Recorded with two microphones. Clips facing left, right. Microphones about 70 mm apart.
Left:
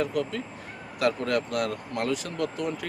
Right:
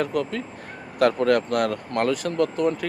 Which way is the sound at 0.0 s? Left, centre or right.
Right.